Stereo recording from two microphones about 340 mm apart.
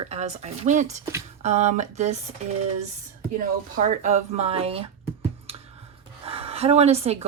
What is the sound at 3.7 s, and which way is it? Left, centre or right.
Speech, right.